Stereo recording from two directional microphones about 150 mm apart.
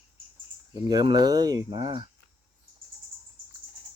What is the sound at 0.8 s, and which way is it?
Speech, 30° right (ahead or behind).